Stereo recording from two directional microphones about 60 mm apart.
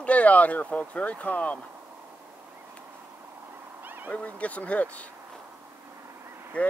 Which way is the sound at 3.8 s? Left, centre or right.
Right.